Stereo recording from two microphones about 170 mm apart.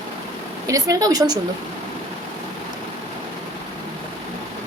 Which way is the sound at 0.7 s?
20° right (ahead or behind).